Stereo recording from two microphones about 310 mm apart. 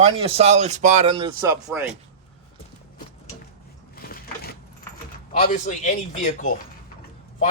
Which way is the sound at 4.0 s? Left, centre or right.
Left.